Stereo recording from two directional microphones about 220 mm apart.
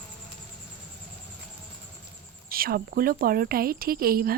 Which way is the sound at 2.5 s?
40° right (ahead or behind).